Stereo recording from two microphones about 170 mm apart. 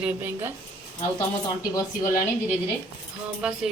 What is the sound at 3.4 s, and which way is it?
Speech, 5° right (ahead or behind).